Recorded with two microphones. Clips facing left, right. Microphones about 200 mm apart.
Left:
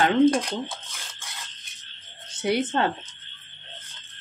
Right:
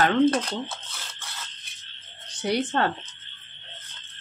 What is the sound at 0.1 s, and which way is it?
Speech, 10° left (ahead or behind).